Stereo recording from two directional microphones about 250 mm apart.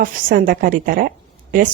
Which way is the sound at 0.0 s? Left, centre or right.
Right.